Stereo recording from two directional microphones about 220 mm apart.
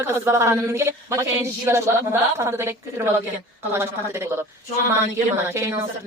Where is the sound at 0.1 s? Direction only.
10° right (ahead or behind).